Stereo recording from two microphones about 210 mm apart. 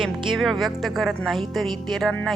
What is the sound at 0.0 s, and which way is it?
A woman's voice, centre (ahead or behind).